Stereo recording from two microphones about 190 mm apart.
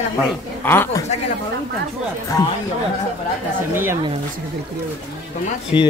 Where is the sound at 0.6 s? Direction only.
10° left (ahead or behind).